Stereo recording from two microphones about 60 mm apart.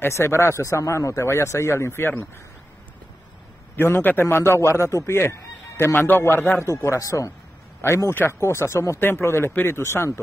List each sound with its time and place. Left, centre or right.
0.0 s speech: left
3.7 s speech: left
5.9 s speech: left
7.0 s a man's voice: left
7.8 s speech: left